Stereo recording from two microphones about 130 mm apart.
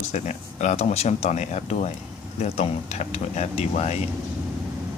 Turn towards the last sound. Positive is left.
turn(degrees=60)  # may be behind; listen again after turning